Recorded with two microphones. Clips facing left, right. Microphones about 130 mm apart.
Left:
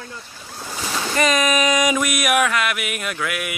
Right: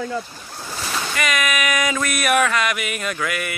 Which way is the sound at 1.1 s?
30° left (ahead or behind).